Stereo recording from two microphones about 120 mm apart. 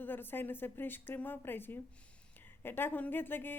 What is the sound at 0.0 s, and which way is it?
A woman's voice, 15° left (ahead or behind).